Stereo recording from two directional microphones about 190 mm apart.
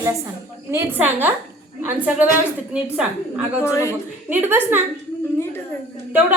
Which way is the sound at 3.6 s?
15° left (ahead or behind).